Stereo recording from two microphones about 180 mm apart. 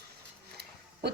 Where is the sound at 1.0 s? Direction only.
65° right (ahead or behind).